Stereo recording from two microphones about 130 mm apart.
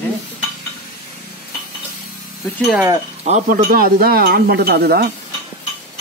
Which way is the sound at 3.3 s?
70° right (ahead or behind).